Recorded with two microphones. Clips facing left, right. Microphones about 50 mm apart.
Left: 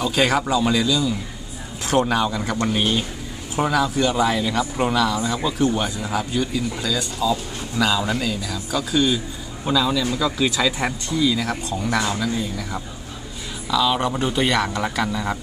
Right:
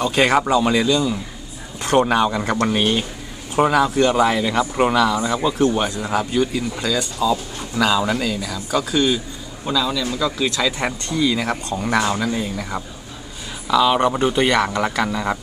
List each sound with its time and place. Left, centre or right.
0.1 s speech: centre
5.5 s speech: centre
5.9 s speech: centre
9.7 s speech: centre
10.9 s speech: centre